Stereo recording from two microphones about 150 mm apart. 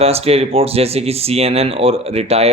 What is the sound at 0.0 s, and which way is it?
Speech, 40° right (ahead or behind).